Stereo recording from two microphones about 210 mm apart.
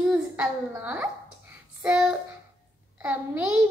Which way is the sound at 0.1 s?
5° right (ahead or behind).